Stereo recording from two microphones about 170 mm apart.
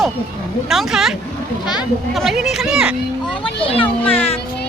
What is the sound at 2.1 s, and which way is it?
Speech, centre (ahead or behind).